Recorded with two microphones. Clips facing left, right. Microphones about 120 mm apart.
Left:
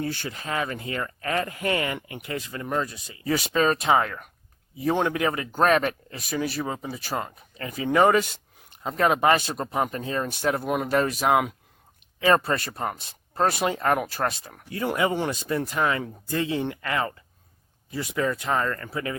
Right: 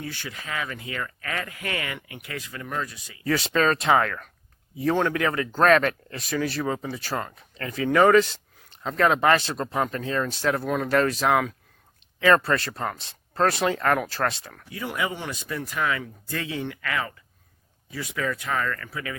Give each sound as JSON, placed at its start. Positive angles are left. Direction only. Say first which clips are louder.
{"t": 0.0, "sound": "speech", "louder": "left 5 dB", "side_deg": 35}
{"t": 3.2, "sound": "speech", "louder": "even", "side_deg": 10}
{"t": 14.7, "sound": "speech", "louder": "left 5 dB", "side_deg": 40}